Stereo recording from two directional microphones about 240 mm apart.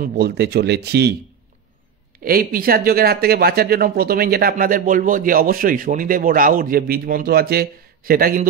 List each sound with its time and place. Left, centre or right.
0.0 s speech: right
2.2 s speech: right